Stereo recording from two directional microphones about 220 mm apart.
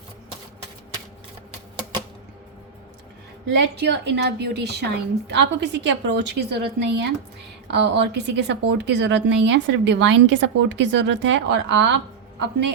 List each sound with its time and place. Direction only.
3.4 s a woman's voice: 50° right (ahead or behind)